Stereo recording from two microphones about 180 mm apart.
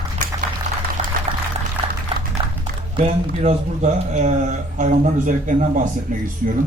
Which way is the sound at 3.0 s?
40° right (ahead or behind).